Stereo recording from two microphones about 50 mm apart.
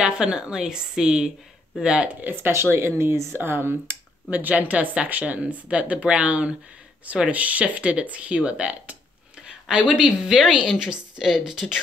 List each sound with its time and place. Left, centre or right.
0.0 s a woman's voice: centre
2.2 s speech: right
2.5 s speech: right
4.3 s a woman's voice: right; by 11.8 s centre